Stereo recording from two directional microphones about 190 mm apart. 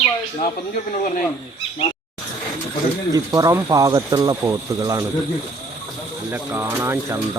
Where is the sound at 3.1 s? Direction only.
20° right (ahead or behind).